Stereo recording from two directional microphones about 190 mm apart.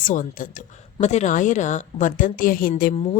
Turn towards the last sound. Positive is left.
turn(degrees=35)  # may be behind; listen again after turning